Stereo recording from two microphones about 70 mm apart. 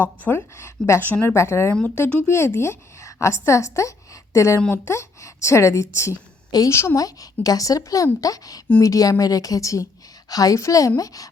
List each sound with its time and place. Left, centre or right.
0.0 s a woman's voice: left
1.0 s speech: left
1.3 s a woman's voice: left